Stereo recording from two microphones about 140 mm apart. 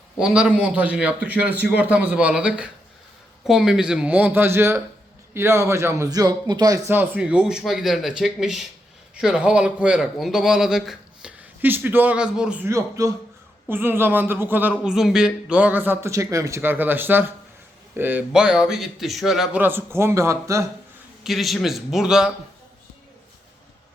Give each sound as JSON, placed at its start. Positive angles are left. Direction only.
{"t": 0.2, "sound": "a man's voice", "side_deg": -5}
{"t": 12.6, "sound": "a man's voice", "side_deg": -25}
{"t": 19.6, "sound": "a man's voice", "side_deg": -15}
{"t": 21.2, "sound": "speech", "side_deg": 0}